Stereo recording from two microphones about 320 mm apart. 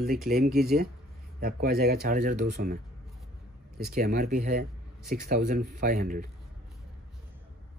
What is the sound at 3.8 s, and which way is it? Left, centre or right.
Speech, right.